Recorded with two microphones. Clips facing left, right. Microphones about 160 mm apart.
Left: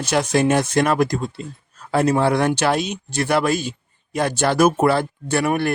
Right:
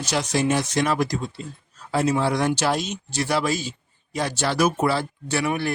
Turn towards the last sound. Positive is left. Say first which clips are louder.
# left 4 dB
turn(degrees=55)  # may be behind; listen again after turning